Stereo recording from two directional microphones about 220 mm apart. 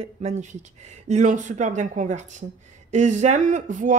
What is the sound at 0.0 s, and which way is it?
Speech, 30° right (ahead or behind).